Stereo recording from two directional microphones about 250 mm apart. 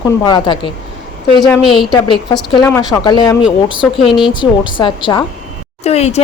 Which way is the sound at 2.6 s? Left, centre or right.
Centre.